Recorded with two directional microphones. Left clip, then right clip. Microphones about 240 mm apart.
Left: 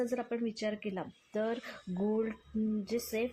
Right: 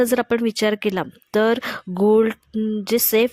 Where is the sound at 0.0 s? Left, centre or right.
Right.